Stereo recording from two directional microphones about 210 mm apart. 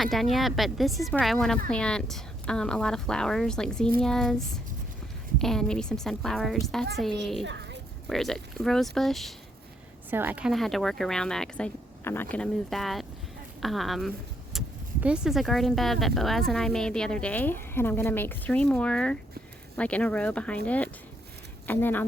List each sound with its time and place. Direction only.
0.0 s speech: centre (ahead or behind)
7.4 s a sound: 55° right (ahead or behind)
8.0 s speech: centre (ahead or behind)
10.1 s speech: 10° right (ahead or behind); by 22.0 s 10° left (ahead or behind)